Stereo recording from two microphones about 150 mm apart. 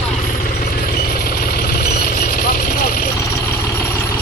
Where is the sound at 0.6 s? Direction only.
70° left (ahead or behind).